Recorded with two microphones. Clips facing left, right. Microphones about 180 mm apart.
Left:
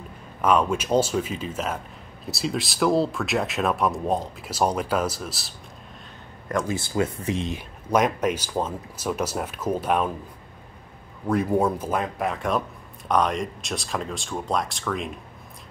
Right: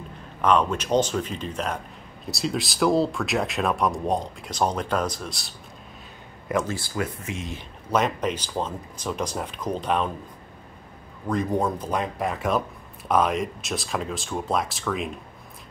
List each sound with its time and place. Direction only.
0.4 s speech: 5° left (ahead or behind)
6.7 s speech: 25° left (ahead or behind)
7.5 s speech: 10° left (ahead or behind)
11.2 s speech: 10° left (ahead or behind)